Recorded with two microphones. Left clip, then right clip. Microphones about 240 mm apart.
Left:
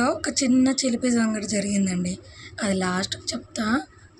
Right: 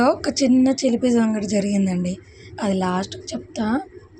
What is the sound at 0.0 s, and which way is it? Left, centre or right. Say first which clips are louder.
Speech: right 5 dB; centre.